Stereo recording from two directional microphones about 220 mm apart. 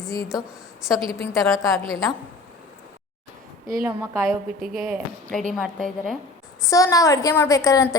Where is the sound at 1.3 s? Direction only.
15° left (ahead or behind).